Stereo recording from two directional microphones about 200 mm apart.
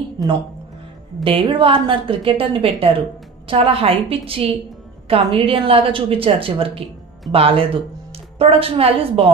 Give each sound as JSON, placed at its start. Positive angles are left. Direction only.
{"t": 1.2, "sound": "a woman's voice", "side_deg": -25}